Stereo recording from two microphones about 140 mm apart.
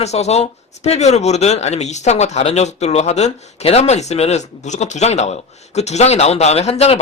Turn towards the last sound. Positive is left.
turn(degrees=50)  # may be behind; listen again after turning